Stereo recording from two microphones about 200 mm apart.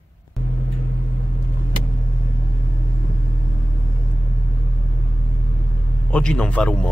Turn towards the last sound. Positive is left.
turn(degrees=5)  # may be behind; listen again after turning